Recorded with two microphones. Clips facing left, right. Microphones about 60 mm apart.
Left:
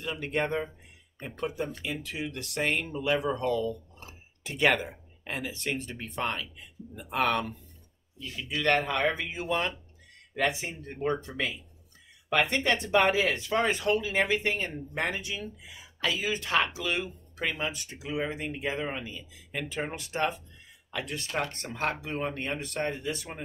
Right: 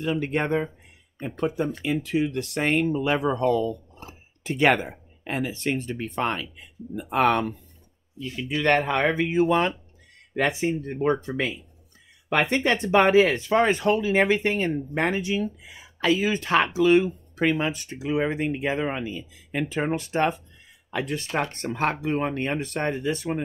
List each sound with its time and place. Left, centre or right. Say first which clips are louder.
0.0 s speech: right 5 dB; right
10.3 s speech: right 6 dB; right